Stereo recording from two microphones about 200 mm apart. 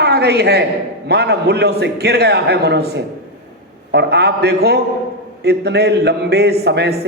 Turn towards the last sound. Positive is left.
turn(degrees=-55)  # may be behind; listen again after turning